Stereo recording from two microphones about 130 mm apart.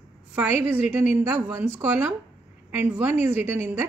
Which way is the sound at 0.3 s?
15° right (ahead or behind).